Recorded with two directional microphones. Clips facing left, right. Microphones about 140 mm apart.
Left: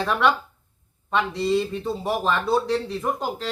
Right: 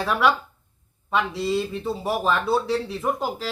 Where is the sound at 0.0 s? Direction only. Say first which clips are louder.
Even; 5° right (ahead or behind).